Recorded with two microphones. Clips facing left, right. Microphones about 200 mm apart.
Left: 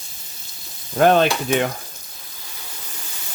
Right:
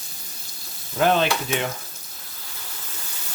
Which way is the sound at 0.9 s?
50° left (ahead or behind).